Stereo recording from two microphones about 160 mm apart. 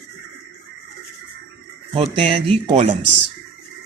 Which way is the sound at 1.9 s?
35° right (ahead or behind).